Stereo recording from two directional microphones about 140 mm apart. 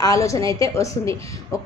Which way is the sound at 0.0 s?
25° left (ahead or behind).